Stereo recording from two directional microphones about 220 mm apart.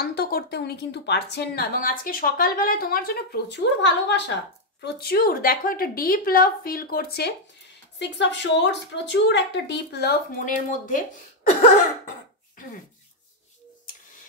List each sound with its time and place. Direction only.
0.0 s a woman's voice: 45° left (ahead or behind)